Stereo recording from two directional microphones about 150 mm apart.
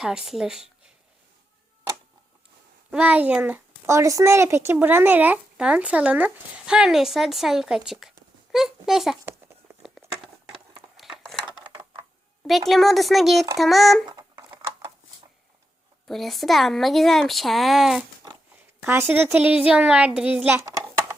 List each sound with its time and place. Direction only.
0.0 s speech: 5° right (ahead or behind)
2.9 s speech: 10° right (ahead or behind)
3.8 s a child's voice: 20° right (ahead or behind); by 9.1 s centre (ahead or behind)
10.0 s a sound: 15° right (ahead or behind)
10.9 s a sound: centre (ahead or behind)
12.5 s speech: centre (ahead or behind)
14.1 s typing: 30° right (ahead or behind)
16.0 s speech: centre (ahead or behind)
18.8 s a child's voice: 15° right (ahead or behind)